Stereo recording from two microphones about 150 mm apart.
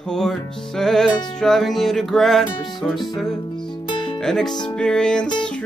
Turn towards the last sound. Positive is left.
turn(degrees=5)  # may be behind; listen again after turning